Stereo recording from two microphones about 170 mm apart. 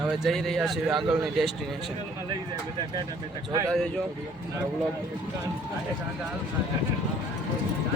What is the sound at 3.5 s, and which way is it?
Speech, 20° right (ahead or behind).